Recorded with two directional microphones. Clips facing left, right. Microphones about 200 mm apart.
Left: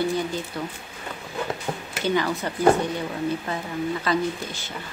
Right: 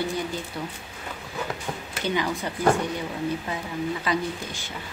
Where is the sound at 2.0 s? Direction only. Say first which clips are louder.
Left 3 dB; 15° right (ahead or behind).